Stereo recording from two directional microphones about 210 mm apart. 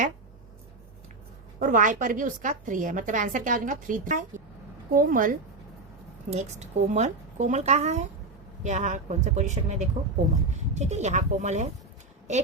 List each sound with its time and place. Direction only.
1.5 s a woman's voice: 40° right (ahead or behind)